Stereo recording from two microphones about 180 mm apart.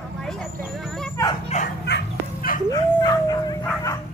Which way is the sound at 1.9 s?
70° left (ahead or behind).